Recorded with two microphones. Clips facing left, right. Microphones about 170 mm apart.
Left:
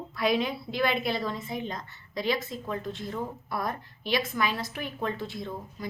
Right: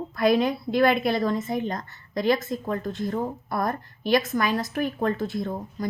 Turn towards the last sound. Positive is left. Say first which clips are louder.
# right 7 dB
turn(degrees=-45)  # may be behind; listen again after turning